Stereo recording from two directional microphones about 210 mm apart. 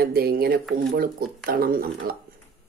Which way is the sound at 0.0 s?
45° right (ahead or behind).